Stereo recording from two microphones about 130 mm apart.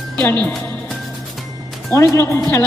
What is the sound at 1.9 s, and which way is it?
Speech, 25° left (ahead or behind).